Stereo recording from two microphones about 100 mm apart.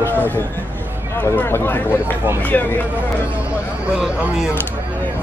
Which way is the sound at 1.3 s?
20° left (ahead or behind).